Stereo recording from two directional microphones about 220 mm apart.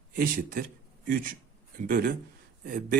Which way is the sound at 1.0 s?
40° right (ahead or behind).